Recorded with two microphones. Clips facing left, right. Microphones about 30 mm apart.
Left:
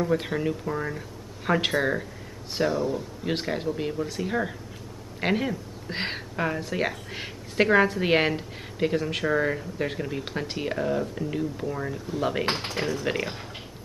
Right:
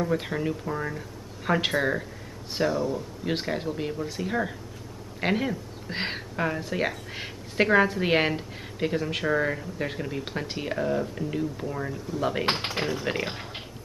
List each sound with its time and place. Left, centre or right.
0.0 s speech: centre
12.6 s speech: centre
13.0 s speech: centre